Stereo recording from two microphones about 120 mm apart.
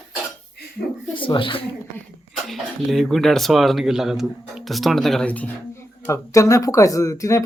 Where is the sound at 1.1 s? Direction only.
45° left (ahead or behind).